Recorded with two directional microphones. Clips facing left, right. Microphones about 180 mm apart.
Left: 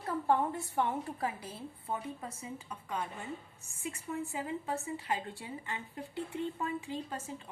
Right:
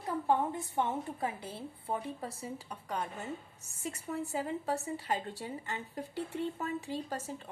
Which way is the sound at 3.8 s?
40° right (ahead or behind).